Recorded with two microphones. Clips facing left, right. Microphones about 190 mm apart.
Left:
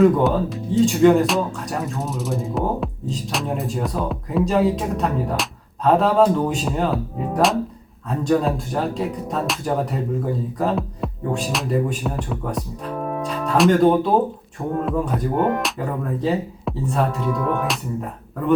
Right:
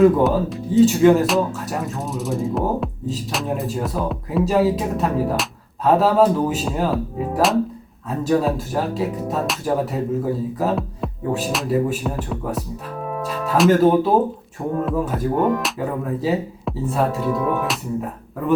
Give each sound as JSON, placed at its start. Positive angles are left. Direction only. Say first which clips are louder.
{"t": 0.0, "sound": "speech", "louder": "right 1 dB", "side_deg": 0}